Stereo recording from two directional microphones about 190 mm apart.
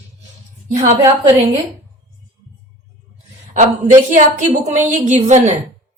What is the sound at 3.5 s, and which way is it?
A woman's voice, 35° right (ahead or behind).